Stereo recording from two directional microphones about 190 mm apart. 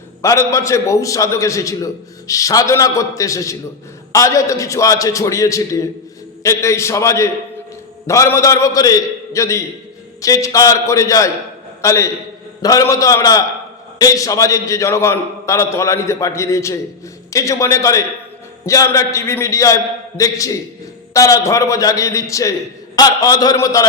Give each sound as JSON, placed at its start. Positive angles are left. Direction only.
{"t": 0.2, "sound": "a man's voice", "side_deg": 15}